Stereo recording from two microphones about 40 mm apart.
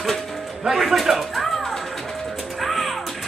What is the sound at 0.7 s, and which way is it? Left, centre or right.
Speech, centre.